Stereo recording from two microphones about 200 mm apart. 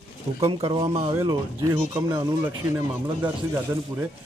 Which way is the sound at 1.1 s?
15° right (ahead or behind).